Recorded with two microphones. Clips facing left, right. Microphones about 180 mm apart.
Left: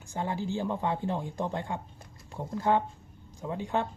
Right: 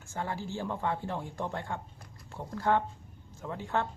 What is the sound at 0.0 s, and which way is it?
Speech, 15° left (ahead or behind).